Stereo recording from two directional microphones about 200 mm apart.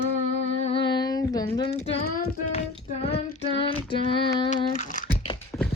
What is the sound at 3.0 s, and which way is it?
Child singing, 30° left (ahead or behind).